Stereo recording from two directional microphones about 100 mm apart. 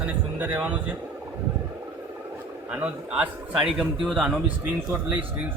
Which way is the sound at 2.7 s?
10° right (ahead or behind).